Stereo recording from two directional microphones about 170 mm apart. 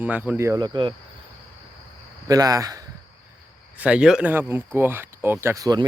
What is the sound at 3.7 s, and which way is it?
Speech, 5° right (ahead or behind).